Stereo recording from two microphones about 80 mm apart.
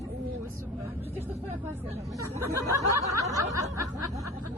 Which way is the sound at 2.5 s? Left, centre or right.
Right.